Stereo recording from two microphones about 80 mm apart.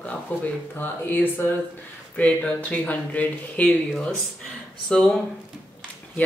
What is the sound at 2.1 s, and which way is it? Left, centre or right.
Speech, centre.